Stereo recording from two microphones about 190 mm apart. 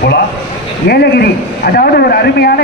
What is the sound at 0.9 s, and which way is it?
A man's voice, 55° left (ahead or behind).